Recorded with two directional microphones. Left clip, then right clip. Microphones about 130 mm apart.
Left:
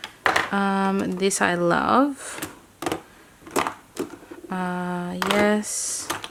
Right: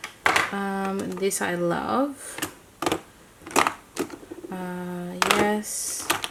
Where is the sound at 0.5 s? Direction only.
40° left (ahead or behind).